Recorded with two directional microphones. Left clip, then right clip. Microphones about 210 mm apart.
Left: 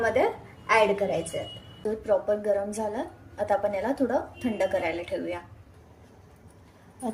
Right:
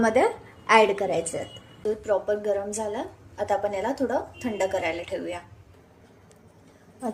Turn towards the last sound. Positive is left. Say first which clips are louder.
# right 1 dB
turn(degrees=0)  # may be behind; listen again after turning